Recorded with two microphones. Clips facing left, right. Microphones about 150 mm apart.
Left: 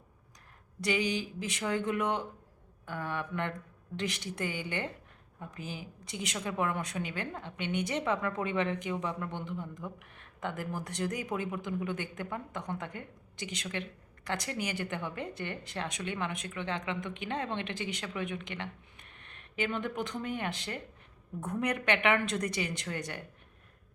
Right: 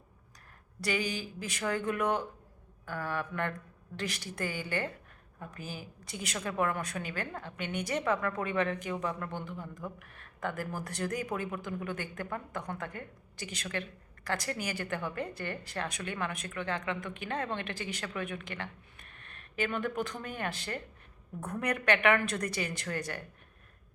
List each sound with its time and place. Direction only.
0.8 s a woman's voice: 20° left (ahead or behind)
10.0 s a sound: 20° left (ahead or behind)
10.8 s a woman's voice: 20° left (ahead or behind)